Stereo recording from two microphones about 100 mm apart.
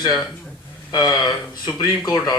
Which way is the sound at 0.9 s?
45° left (ahead or behind).